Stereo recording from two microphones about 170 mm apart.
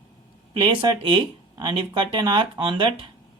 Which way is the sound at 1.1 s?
25° right (ahead or behind).